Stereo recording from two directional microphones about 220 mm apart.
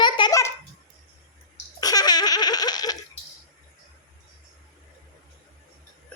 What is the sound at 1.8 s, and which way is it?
Laughter, 15° left (ahead or behind).